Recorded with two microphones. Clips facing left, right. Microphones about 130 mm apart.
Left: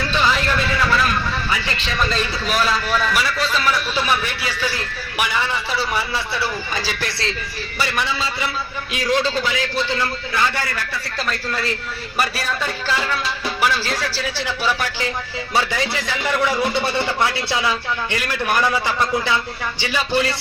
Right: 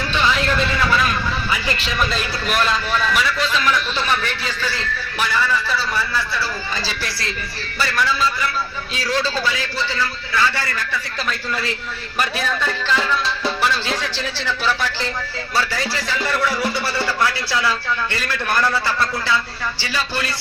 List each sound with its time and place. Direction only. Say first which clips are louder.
2.0 s a man's voice: left 4 dB; 5° right (ahead or behind); by 6.2 s 20° left (ahead or behind)
7.8 s a man's voice: right 3 dB; 20° left (ahead or behind)
12.2 s a man's voice: right 1 dB; 5° left (ahead or behind)